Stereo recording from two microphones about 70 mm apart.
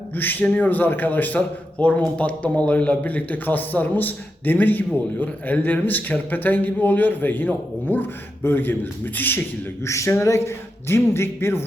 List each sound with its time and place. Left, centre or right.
0.2 s speech: left
9.8 s speech: left